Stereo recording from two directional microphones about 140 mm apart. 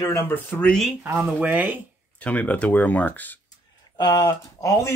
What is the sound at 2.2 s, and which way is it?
Speech, 10° left (ahead or behind).